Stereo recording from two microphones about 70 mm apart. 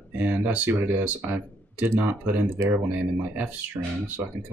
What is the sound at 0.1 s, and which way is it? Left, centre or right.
Speech, right.